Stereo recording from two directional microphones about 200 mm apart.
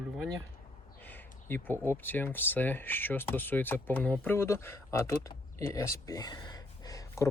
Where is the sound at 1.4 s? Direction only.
10° left (ahead or behind).